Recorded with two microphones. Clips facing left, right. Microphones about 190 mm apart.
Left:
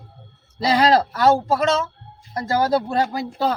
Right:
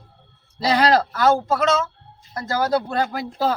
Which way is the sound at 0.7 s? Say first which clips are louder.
Left 1 dB; 25° left (ahead or behind).